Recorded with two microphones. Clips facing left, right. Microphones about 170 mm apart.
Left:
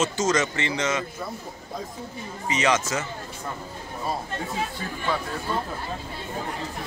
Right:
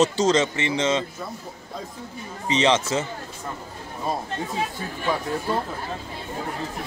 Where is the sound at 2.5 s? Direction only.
30° right (ahead or behind).